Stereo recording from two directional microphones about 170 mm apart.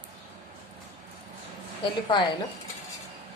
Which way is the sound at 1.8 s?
25° left (ahead or behind).